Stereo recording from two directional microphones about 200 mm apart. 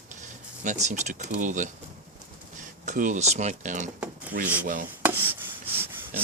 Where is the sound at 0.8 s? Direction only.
35° right (ahead or behind).